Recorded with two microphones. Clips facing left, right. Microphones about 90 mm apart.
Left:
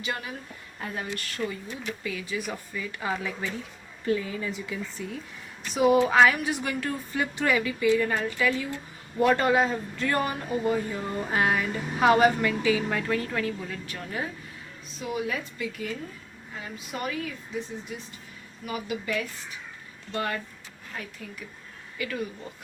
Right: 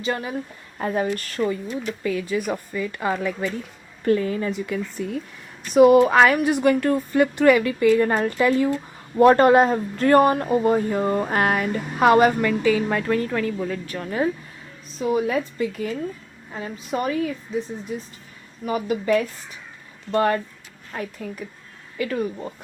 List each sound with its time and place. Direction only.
0.0 s a woman's voice: 35° right (ahead or behind)
1.4 s speech: 90° right
2.0 s a woman's voice: 45° right (ahead or behind)
18.6 s a woman's voice: 40° right (ahead or behind)